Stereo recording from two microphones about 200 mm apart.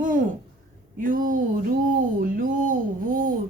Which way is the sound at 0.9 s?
45° right (ahead or behind).